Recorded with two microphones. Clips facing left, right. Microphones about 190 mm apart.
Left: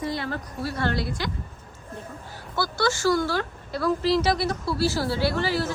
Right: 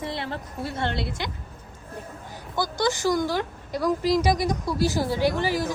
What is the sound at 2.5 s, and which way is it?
A woman's voice, 15° right (ahead or behind).